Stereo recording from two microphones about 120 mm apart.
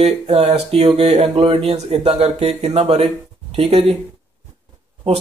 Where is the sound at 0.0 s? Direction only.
65° right (ahead or behind).